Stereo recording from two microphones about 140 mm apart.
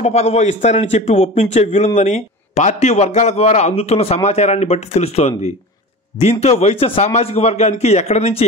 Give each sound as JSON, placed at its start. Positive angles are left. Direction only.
{"t": 0.0, "sound": "a man's voice", "side_deg": 50}